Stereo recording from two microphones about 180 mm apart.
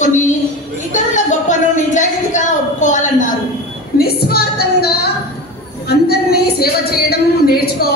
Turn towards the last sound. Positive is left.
turn(degrees=60)  # may be behind; listen again after turning